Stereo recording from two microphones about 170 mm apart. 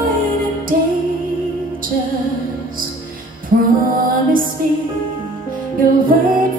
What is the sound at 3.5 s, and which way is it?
Music, 55° right (ahead or behind).